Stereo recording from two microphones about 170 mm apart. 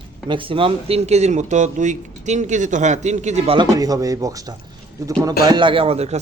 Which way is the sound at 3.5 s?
25° right (ahead or behind).